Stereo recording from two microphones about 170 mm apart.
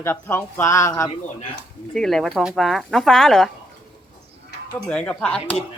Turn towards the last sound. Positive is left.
turn(degrees=5)  # may be behind; listen again after turning